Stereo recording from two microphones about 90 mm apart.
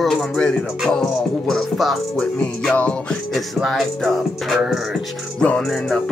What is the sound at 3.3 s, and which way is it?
Music, centre (ahead or behind).